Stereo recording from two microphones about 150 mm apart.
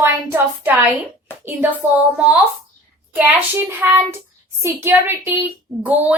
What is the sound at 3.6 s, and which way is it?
A woman's voice, 15° right (ahead or behind).